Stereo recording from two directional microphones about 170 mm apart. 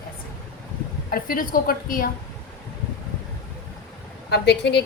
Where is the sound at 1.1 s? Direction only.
55° left (ahead or behind).